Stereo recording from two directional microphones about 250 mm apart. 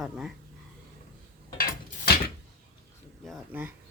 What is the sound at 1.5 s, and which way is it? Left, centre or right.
Mechanisms, left.